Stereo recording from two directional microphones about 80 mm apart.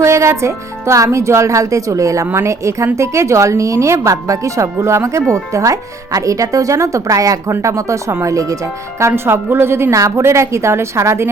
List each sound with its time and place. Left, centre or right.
0.0 s speech: right